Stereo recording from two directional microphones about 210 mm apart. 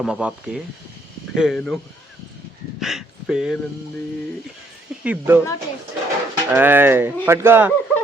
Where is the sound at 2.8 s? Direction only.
Centre (ahead or behind).